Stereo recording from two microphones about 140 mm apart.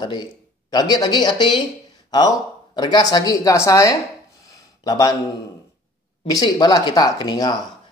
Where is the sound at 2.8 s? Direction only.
30° left (ahead or behind).